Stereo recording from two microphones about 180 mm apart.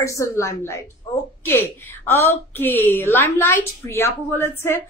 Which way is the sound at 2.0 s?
10° left (ahead or behind).